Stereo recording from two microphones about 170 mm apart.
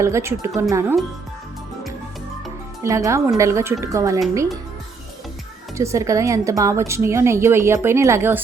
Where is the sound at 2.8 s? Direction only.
20° right (ahead or behind).